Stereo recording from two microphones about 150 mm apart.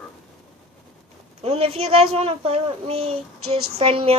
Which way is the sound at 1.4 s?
40° right (ahead or behind).